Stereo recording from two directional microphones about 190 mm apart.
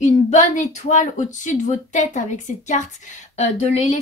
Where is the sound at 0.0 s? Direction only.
40° left (ahead or behind).